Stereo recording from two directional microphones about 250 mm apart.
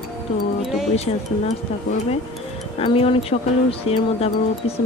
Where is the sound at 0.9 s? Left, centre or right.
Left.